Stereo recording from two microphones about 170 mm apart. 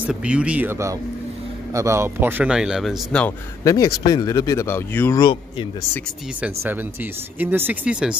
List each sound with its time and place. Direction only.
0.0 s speech: 5° right (ahead or behind)
3.6 s speech: 20° left (ahead or behind)
5.2 s speech: 25° left (ahead or behind)
6.4 s speech: 10° right (ahead or behind)